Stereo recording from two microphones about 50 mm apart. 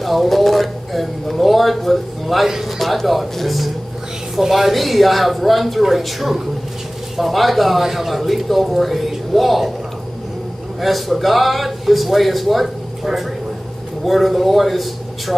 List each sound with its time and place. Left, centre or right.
0.0 s speech: centre
10.8 s a man's voice: centre